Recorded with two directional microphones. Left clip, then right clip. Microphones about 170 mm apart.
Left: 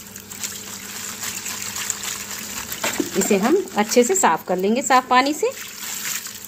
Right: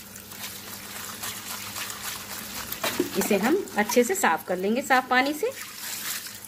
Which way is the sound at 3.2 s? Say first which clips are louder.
Left 6 dB; 35° left (ahead or behind).